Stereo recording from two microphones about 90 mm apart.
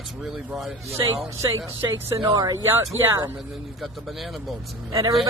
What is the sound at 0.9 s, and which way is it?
Speech, 35° right (ahead or behind).